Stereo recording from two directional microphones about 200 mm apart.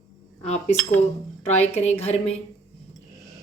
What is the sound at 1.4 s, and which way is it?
Speech, 35° left (ahead or behind).